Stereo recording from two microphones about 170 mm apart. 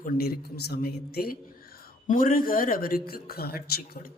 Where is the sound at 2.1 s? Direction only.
55° left (ahead or behind).